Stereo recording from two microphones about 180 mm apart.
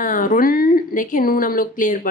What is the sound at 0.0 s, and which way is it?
Speech, 45° left (ahead or behind).